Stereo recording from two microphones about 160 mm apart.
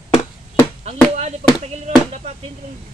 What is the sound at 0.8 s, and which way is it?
Speech, 45° right (ahead or behind).